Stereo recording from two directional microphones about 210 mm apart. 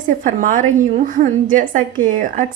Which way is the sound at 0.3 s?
40° right (ahead or behind).